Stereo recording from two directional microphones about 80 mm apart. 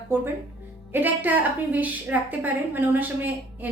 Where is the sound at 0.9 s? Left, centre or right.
Right.